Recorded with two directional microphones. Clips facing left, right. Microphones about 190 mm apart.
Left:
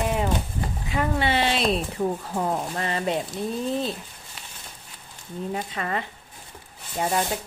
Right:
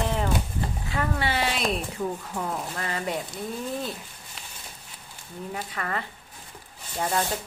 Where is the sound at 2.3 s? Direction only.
30° left (ahead or behind).